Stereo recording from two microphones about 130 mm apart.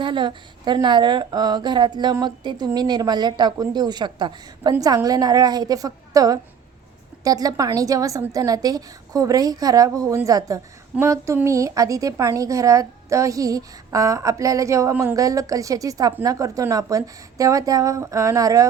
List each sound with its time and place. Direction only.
0.0 s a woman's voice: 35° right (ahead or behind)